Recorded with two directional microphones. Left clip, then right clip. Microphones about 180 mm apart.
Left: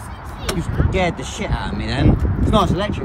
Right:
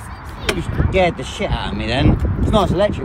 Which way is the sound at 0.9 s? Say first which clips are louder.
Right 5 dB; centre (ahead or behind).